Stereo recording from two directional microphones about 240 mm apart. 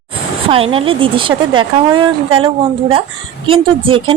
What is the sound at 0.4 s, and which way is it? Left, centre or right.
Speech, right.